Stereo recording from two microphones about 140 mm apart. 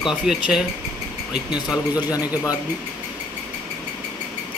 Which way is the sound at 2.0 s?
25° left (ahead or behind).